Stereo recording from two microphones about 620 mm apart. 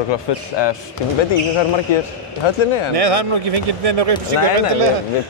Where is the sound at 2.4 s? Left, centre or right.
Left.